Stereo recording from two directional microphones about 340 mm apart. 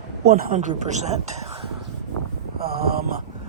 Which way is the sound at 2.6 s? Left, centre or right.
Right.